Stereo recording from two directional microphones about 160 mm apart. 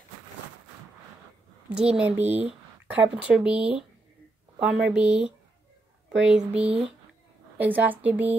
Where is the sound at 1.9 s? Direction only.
10° right (ahead or behind).